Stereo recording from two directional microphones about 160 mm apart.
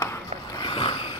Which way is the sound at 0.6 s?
30° left (ahead or behind).